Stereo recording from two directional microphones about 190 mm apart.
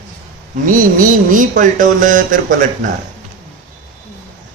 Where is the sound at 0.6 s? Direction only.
45° right (ahead or behind).